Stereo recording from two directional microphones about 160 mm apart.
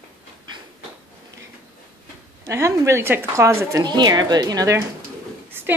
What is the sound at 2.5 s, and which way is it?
A woman's voice, 20° right (ahead or behind).